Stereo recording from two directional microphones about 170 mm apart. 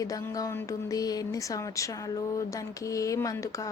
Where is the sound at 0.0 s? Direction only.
20° left (ahead or behind).